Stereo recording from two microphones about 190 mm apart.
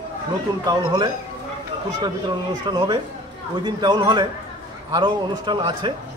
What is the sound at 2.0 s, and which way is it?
A man's voice, 25° right (ahead or behind).